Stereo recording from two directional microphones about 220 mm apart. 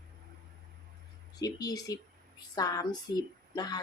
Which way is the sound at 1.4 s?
15° left (ahead or behind).